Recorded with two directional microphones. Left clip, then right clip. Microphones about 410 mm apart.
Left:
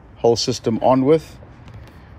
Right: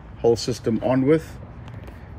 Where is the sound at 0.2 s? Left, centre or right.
Centre.